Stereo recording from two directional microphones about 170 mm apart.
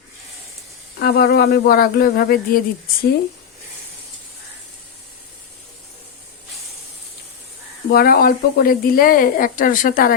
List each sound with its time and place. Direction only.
0.9 s a woman's voice: 65° left (ahead or behind)
7.9 s a woman's voice: 60° left (ahead or behind)